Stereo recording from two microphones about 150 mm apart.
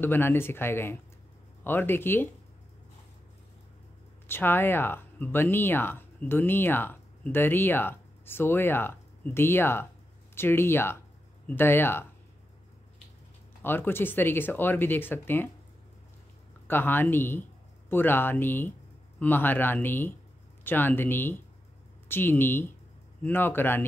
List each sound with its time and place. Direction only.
0.0 s speech: 15° left (ahead or behind)
4.3 s speech: 15° left (ahead or behind)
13.6 s speech: 15° left (ahead or behind)
16.6 s speech: 15° left (ahead or behind)